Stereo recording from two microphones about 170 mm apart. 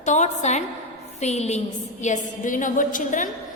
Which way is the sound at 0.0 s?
45° left (ahead or behind).